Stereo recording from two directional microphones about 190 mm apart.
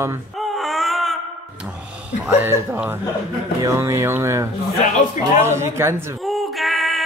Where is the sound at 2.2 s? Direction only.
10° right (ahead or behind).